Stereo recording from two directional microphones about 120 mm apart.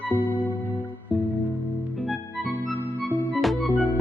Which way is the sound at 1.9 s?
Centre (ahead or behind).